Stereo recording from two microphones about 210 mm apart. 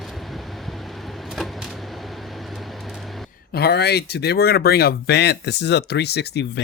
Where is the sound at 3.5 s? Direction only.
50° left (ahead or behind).